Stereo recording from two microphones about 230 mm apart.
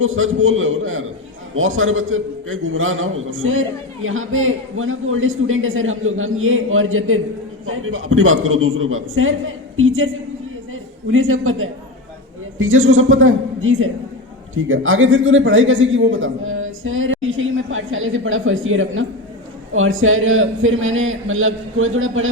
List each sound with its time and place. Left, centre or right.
0.0 s a man's voice: right